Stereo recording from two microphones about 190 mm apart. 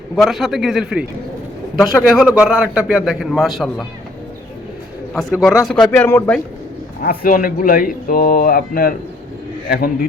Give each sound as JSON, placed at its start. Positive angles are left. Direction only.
{"t": 0.2, "sound": "a man's voice", "side_deg": 0}
{"t": 5.1, "sound": "a man's voice", "side_deg": 0}
{"t": 7.0, "sound": "speech", "side_deg": 50}